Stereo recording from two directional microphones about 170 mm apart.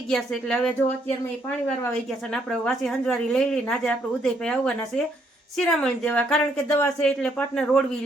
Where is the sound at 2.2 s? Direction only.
5° left (ahead or behind).